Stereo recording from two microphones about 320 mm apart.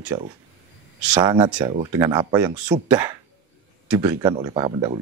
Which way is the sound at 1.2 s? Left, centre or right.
Centre.